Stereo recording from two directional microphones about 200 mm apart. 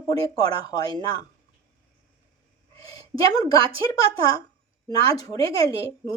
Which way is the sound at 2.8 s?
20° left (ahead or behind).